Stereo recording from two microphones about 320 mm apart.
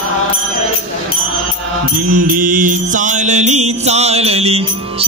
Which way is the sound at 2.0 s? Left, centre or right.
Right.